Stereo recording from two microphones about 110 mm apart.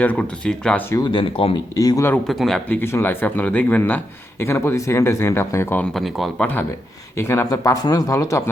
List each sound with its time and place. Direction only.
0.0 s speech: 10° left (ahead or behind)
1.0 s speech: 50° left (ahead or behind)
1.7 s speech: 35° left (ahead or behind)
2.2 s speech: centre (ahead or behind)
2.6 s speech: 20° left (ahead or behind)
5.9 s speech: centre (ahead or behind)
7.2 s speech: 25° left (ahead or behind)